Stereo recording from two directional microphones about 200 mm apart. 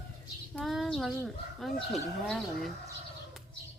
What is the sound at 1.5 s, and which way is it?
Speech, centre (ahead or behind).